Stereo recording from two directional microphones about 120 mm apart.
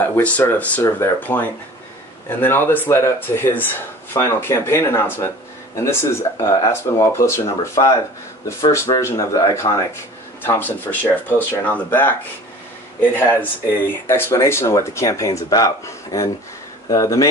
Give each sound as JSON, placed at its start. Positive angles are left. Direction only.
{"t": 0.0, "sound": "speech", "side_deg": 15}
{"t": 10.4, "sound": "speech", "side_deg": 15}